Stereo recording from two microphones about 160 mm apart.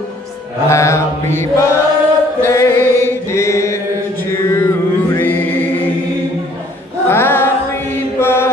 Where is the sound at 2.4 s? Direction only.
20° left (ahead or behind).